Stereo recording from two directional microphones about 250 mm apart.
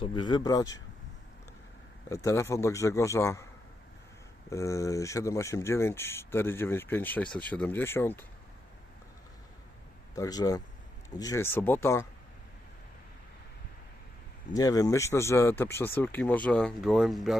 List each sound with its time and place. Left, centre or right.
0.0 s speech: centre
2.0 s speech: centre
4.4 s speech: centre
10.2 s speech: centre
14.5 s speech: centre